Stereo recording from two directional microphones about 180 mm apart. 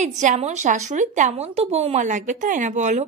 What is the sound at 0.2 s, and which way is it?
Speech, 40° right (ahead or behind).